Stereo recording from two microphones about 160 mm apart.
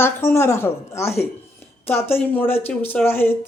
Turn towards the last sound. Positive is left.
turn(degrees=15)  # may be behind; listen again after turning